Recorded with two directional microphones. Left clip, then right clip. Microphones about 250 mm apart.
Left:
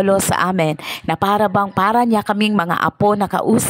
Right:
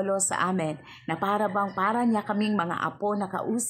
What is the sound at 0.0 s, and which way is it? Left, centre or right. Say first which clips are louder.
Speech: left 11 dB; left.